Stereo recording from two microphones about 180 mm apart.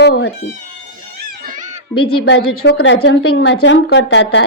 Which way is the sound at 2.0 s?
65° left (ahead or behind).